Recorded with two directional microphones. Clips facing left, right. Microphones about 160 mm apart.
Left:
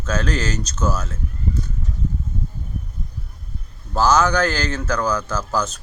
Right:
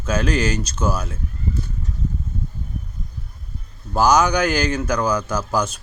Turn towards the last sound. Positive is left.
turn(degrees=-10)  # may be behind; listen again after turning